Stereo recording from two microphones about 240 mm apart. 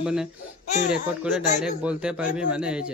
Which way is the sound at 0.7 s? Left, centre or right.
Left.